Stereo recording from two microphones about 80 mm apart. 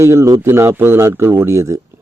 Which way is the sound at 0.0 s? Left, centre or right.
Right.